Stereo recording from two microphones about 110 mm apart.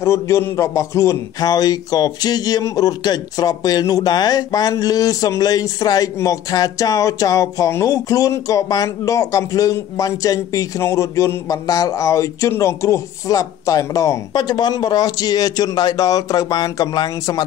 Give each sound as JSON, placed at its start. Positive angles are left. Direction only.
{"t": 0.0, "sound": "speech", "side_deg": 25}